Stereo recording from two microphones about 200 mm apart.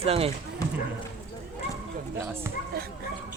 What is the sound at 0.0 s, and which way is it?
Speech, 30° right (ahead or behind).